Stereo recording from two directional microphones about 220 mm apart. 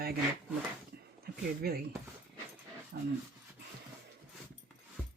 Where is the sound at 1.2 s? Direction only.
45° right (ahead or behind).